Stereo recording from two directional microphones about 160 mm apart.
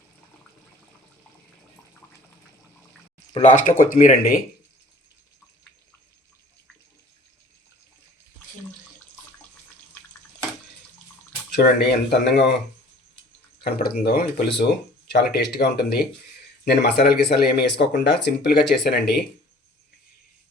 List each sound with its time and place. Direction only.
3.4 s speech: 50° left (ahead or behind); by 4.4 s 70° left (ahead or behind)
11.5 s speech: 90° left
13.7 s speech: 75° left (ahead or behind); by 18.5 s 90° left
18.9 s speech: 80° left